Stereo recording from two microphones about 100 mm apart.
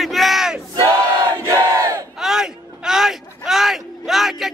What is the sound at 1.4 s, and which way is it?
Battle cry, 35° right (ahead or behind).